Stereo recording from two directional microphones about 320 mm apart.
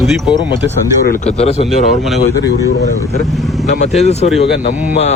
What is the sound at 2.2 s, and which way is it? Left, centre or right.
Speech, left.